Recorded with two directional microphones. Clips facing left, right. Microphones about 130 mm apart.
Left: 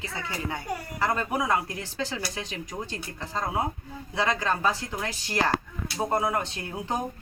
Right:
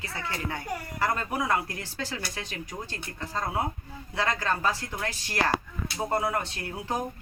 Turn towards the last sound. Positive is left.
turn(degrees=20)  # may be behind; listen again after turning